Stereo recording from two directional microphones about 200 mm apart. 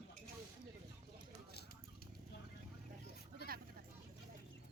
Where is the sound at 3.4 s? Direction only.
50° right (ahead or behind).